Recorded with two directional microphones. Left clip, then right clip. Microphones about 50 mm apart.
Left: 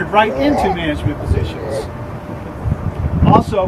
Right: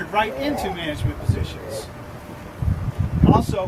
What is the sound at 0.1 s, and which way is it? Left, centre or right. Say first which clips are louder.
Speech: left 9 dB; centre.